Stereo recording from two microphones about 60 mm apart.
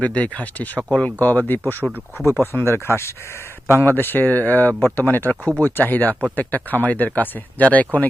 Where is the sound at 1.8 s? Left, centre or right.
Centre.